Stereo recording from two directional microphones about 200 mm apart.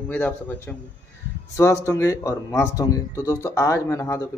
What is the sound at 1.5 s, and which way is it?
Speech, 15° left (ahead or behind).